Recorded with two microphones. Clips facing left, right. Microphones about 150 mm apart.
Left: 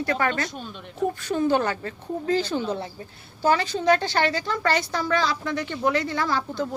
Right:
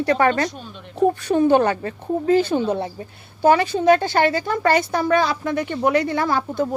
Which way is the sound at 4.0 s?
50° right (ahead or behind).